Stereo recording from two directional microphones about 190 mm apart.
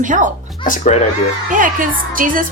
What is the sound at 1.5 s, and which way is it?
Speech, 45° right (ahead or behind).